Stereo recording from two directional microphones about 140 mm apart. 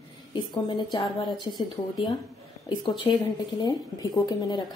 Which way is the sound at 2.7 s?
30° left (ahead or behind).